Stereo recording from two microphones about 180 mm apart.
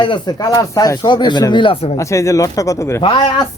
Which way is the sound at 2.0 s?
15° left (ahead or behind).